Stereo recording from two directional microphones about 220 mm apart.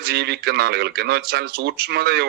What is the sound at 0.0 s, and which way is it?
Speech, 50° right (ahead or behind).